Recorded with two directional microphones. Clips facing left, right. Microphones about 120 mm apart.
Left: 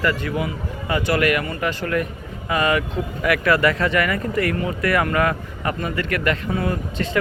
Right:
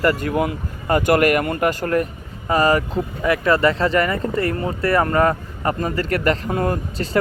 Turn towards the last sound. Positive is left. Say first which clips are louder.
# right 2 dB
turn(degrees=-45)  # may be behind; listen again after turning